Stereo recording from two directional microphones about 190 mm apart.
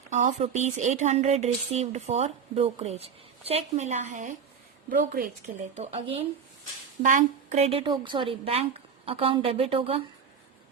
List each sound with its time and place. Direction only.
0.1 s a woman's voice: 35° right (ahead or behind)
5.7 s a woman's voice: 35° right (ahead or behind)